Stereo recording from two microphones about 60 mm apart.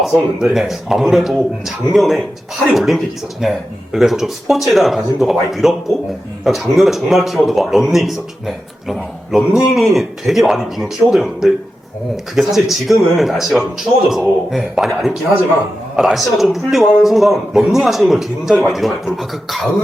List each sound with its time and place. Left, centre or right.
0.0 s a man's voice: centre